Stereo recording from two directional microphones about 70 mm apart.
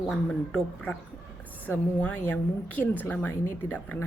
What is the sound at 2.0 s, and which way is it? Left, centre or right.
Speech, centre.